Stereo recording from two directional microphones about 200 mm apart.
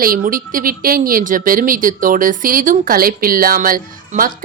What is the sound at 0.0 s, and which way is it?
Speech, 45° right (ahead or behind).